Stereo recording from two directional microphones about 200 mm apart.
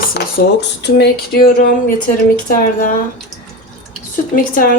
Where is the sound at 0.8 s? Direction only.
55° left (ahead or behind).